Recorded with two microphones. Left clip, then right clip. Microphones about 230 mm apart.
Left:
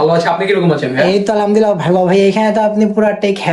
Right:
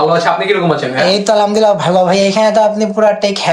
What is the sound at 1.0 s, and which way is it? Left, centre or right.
Speech, centre.